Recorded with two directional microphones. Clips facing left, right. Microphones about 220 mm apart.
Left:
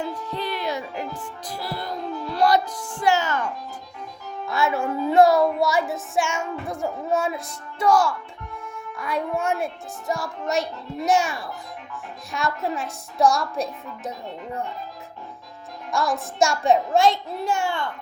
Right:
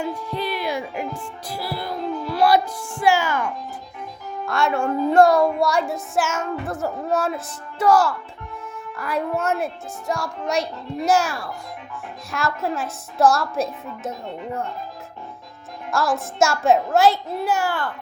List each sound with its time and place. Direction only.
0.0 s music: 10° right (ahead or behind)
4.4 s speech: 5° left (ahead or behind)
15.9 s speech: centre (ahead or behind)